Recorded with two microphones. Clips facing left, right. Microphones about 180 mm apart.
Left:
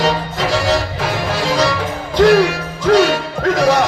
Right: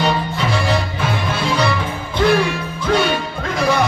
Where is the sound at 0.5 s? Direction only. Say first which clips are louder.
Left 4 dB; 85° left.